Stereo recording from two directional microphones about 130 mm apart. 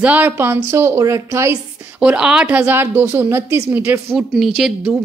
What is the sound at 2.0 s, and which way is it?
A woman's voice, 10° right (ahead or behind).